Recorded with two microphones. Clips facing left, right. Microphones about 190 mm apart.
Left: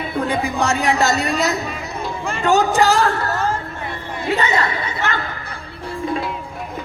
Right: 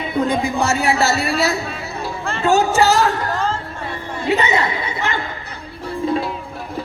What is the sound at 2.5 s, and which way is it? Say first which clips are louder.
Speech: even; 15° left (ahead or behind).